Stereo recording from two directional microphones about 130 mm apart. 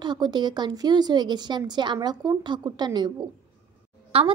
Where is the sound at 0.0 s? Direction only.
35° right (ahead or behind).